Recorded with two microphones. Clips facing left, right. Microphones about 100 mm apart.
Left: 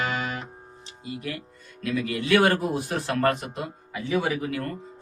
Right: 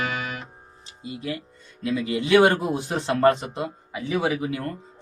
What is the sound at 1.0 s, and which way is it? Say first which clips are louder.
Speech: right 2 dB; 25° right (ahead or behind).